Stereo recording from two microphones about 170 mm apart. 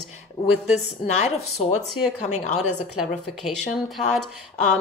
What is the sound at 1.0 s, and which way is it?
Speech, 40° left (ahead or behind).